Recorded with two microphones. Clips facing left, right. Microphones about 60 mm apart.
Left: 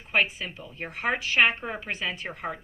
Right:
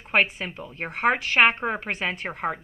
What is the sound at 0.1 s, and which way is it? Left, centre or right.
Speech, right.